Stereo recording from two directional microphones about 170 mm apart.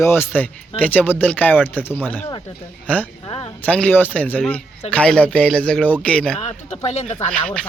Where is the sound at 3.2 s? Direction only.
30° left (ahead or behind).